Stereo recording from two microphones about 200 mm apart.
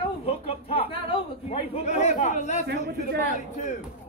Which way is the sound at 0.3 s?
30° left (ahead or behind).